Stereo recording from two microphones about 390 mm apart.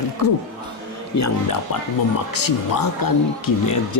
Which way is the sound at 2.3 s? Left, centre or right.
Left.